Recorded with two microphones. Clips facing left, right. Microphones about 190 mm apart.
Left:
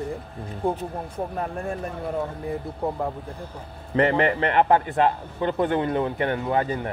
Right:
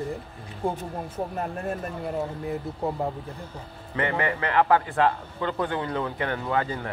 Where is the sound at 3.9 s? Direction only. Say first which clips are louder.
Left 6 dB; 30° left (ahead or behind).